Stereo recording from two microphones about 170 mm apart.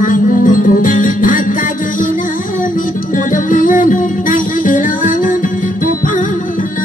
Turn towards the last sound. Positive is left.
turn(degrees=50)  # may be behind; listen again after turning